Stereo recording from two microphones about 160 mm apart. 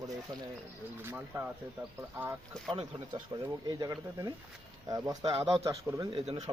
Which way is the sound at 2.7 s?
30° right (ahead or behind).